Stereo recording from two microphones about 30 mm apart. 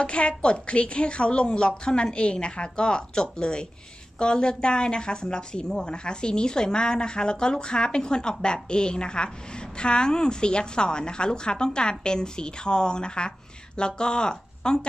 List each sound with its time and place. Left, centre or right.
0.0 s a woman's voice: left